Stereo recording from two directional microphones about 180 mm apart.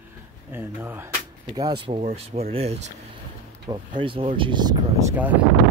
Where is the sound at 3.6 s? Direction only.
25° right (ahead or behind).